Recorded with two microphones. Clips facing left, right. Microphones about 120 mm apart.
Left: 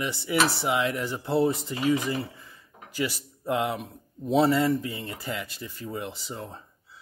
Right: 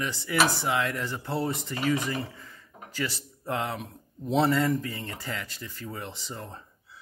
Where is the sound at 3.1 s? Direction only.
5° left (ahead or behind).